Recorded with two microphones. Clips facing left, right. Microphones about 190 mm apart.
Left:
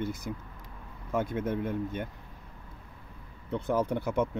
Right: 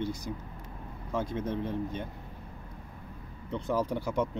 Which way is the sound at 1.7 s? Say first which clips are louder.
Left 1 dB; 55° left (ahead or behind).